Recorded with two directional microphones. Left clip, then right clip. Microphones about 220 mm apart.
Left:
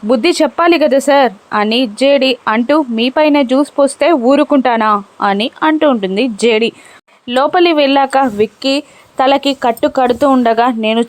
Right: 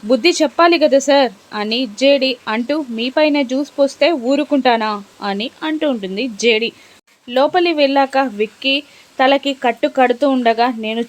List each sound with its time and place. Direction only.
0.1 s speech: 15° left (ahead or behind)